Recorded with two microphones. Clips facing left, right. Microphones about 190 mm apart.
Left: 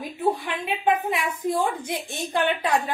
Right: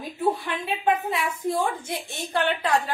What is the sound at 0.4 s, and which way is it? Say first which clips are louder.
A woman's voice: left 1 dB; 15° left (ahead or behind).